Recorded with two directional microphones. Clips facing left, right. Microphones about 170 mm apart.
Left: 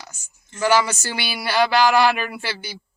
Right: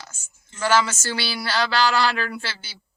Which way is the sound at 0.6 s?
15° left (ahead or behind).